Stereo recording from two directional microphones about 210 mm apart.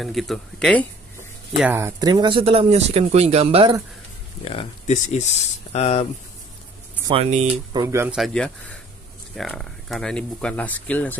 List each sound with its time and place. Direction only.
0.0 s speech: centre (ahead or behind)
1.6 s speech: 10° right (ahead or behind); by 3.7 s 25° right (ahead or behind)
4.5 s speech: 30° left (ahead or behind)
7.1 s speech: 30° right (ahead or behind)
7.7 s speech: 15° right (ahead or behind)
8.2 s speech: 5° left (ahead or behind)